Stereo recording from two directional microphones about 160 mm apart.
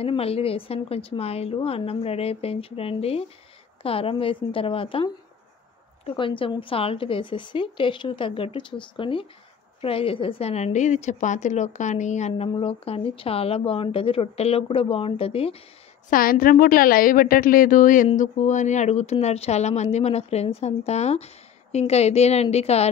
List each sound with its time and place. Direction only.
0.0 s a woman's voice: 40° left (ahead or behind)
16.1 s a woman's voice: 65° left (ahead or behind); by 22.8 s 40° left (ahead or behind)